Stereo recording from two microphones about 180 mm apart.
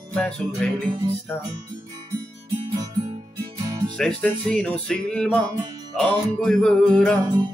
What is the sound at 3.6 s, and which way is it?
Music, 20° right (ahead or behind).